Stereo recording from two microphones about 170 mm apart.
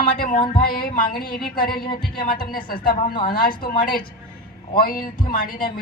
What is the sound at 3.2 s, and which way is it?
Speech, 55° left (ahead or behind).